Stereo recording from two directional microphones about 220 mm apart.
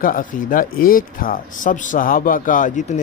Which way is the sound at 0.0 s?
40° left (ahead or behind).